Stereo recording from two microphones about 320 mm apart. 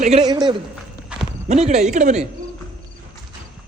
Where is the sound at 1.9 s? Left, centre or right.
Right.